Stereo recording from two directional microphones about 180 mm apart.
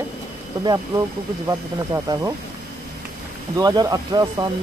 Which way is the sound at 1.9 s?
15° right (ahead or behind).